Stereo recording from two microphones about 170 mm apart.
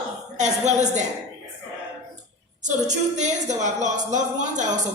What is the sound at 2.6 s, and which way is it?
A woman's voice, 45° right (ahead or behind).